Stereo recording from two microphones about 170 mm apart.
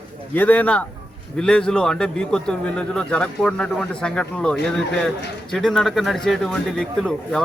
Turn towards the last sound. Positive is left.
turn(degrees=5)  # may be behind; listen again after turning